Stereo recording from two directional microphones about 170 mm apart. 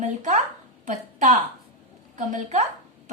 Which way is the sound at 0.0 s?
45° right (ahead or behind).